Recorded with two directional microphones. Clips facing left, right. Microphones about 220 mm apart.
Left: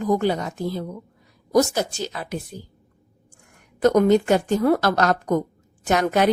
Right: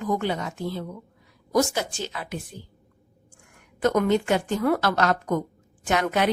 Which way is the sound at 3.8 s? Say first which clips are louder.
Left 5 dB; 40° left (ahead or behind).